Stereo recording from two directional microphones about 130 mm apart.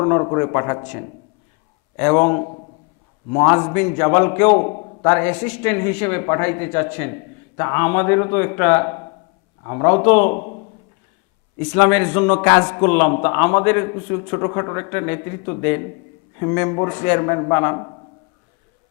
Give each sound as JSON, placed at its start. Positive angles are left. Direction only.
{"t": 0.0, "sound": "a man's voice", "side_deg": 30}
{"t": 10.3, "sound": "a man's voice", "side_deg": 30}
{"t": 11.7, "sound": "a man's voice", "side_deg": 20}